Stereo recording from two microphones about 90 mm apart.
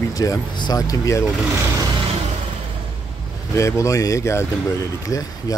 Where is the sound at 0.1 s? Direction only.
40° left (ahead or behind).